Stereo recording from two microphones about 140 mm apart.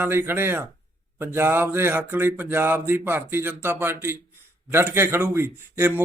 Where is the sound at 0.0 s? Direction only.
15° right (ahead or behind).